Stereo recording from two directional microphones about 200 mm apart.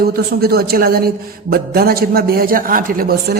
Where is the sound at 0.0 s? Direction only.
50° right (ahead or behind).